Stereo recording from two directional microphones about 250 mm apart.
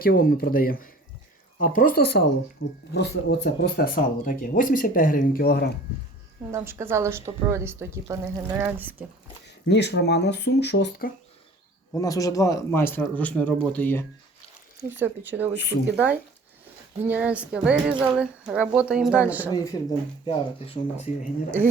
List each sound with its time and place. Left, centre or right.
0.0 s speech: left
6.5 s speech: centre
9.6 s speech: left
11.9 s speech: centre
14.8 s speech: centre
20.2 s speech: left